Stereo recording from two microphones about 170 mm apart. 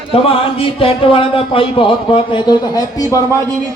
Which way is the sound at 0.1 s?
35° left (ahead or behind).